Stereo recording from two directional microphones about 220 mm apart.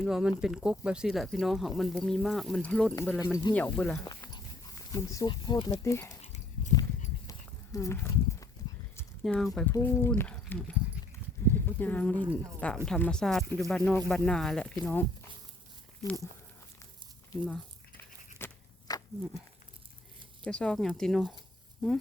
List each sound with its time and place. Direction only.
0.0 s speech: 5° right (ahead or behind)
4.0 s dog: 15° left (ahead or behind)
5.8 s speech: 15° left (ahead or behind)
6.2 s a sound: 35° left (ahead or behind)
7.3 s a sound: 15° left (ahead or behind)
9.6 s speech: 10° left (ahead or behind)
17.4 s crumpling: 10° left (ahead or behind)
20.4 s speech: 5° left (ahead or behind)